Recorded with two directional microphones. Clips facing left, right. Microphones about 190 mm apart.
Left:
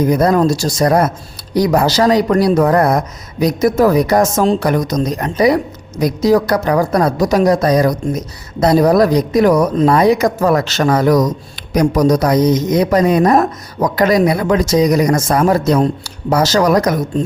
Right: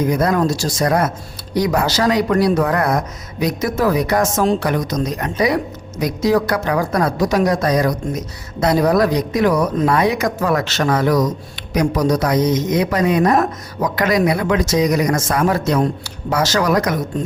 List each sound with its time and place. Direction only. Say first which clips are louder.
0.1 s speech: left 4 dB; 35° left (ahead or behind)